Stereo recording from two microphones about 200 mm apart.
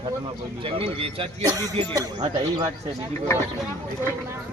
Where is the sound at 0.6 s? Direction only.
25° right (ahead or behind).